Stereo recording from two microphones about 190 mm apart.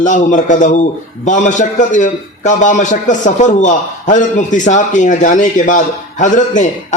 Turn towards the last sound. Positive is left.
turn(degrees=40)  # may be behind; listen again after turning